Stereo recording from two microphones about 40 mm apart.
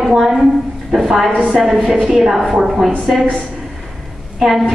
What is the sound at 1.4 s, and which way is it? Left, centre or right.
Speech, centre.